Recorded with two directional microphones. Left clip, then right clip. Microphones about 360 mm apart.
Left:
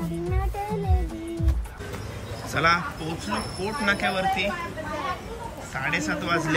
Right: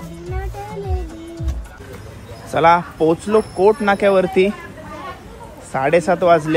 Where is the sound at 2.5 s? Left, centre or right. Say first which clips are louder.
Right 9 dB; centre.